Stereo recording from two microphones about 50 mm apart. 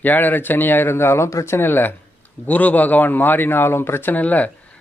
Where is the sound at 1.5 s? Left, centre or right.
Left.